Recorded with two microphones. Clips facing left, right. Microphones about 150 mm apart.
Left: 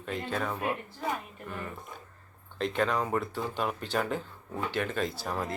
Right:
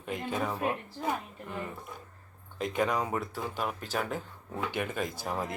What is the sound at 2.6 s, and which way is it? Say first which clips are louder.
Speech: left 1 dB; 10° right (ahead or behind).